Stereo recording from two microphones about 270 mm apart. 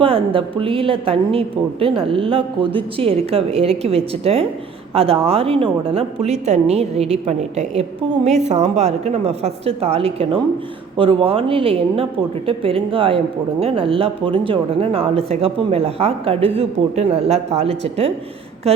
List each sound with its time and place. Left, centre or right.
0.0 s a woman's voice: centre